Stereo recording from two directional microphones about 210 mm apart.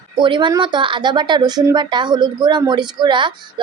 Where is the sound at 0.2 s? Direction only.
20° right (ahead or behind).